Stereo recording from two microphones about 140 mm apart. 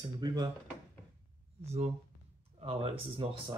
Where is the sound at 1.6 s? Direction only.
50° right (ahead or behind).